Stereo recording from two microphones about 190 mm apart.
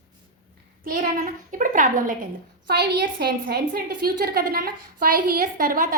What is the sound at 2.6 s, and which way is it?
A woman's voice, 60° right (ahead or behind).